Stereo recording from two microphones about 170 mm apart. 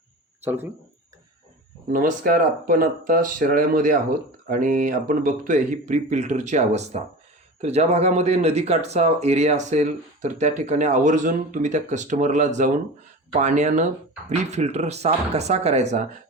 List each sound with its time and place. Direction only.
0.4 s speech: 10° right (ahead or behind)
1.9 s speech: 55° right (ahead or behind)